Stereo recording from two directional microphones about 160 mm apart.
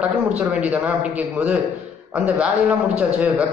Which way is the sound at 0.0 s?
5° right (ahead or behind).